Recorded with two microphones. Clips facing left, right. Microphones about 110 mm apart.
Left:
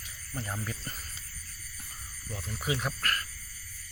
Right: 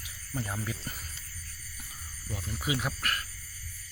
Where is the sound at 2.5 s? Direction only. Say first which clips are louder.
Even; centre (ahead or behind).